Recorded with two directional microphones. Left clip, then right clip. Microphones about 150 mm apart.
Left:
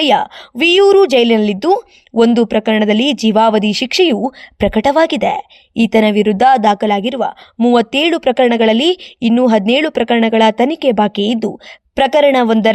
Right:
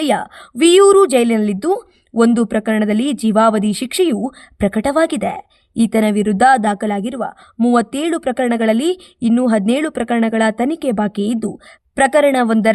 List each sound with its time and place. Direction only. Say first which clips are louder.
0.0 s a woman's voice: left 5 dB; 15° left (ahead or behind)